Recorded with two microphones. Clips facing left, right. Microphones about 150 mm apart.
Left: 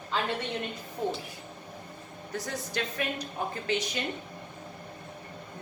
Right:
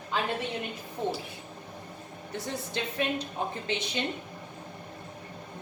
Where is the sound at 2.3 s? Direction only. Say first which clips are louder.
Even; 25° right (ahead or behind).